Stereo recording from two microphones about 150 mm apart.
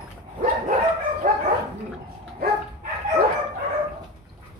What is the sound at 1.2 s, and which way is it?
Dog, 70° right (ahead or behind).